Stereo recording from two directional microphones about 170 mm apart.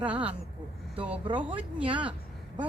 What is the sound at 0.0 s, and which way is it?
Speech, 10° right (ahead or behind).